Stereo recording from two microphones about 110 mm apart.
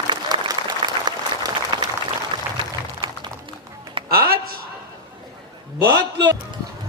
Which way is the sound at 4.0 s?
50° right (ahead or behind).